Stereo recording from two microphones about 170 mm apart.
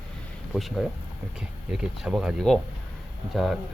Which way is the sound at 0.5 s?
Centre (ahead or behind).